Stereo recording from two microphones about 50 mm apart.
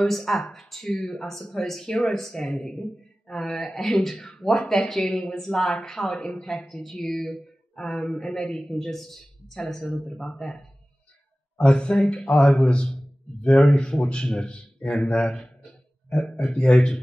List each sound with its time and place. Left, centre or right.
0.0 s a woman's voice: centre
11.5 s a man's voice: centre